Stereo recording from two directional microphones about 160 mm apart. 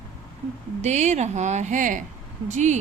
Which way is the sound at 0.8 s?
45° right (ahead or behind).